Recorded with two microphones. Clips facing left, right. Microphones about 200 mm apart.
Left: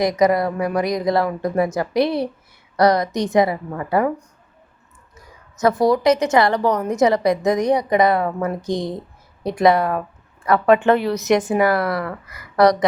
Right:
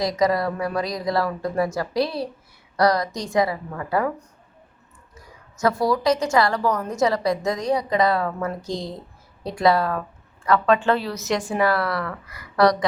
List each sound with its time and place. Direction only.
0.0 s a woman's voice: 20° left (ahead or behind)
5.5 s a woman's voice: 20° left (ahead or behind)